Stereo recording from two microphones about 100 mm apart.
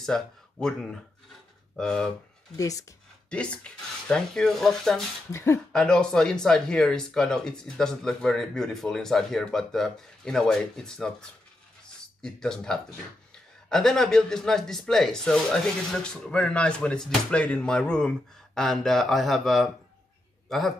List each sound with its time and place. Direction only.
0.0 s speech: 5° left (ahead or behind)
2.5 s speech: 35° left (ahead or behind)
3.3 s speech: 10° left (ahead or behind)
5.3 s speech: 30° left (ahead or behind)
5.7 s a man's voice: 5° left (ahead or behind)